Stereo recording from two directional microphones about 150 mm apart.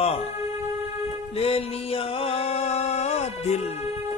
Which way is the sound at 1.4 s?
40° left (ahead or behind).